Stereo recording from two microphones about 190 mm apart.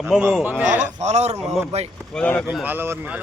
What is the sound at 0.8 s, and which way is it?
A man's voice, 35° right (ahead or behind).